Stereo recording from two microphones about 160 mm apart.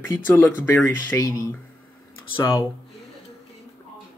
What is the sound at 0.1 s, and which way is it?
Speech, 10° left (ahead or behind).